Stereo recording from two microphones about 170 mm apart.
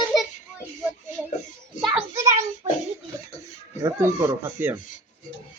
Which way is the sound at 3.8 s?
15° right (ahead or behind).